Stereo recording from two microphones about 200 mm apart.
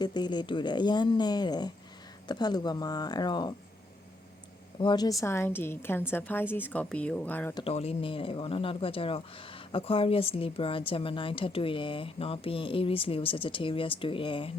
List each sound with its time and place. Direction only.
0.0 s speech: 20° left (ahead or behind)
4.8 s a woman's voice: 20° left (ahead or behind)
7.5 s speech: 30° left (ahead or behind)